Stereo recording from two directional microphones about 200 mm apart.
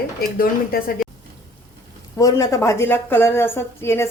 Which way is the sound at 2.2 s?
15° left (ahead or behind).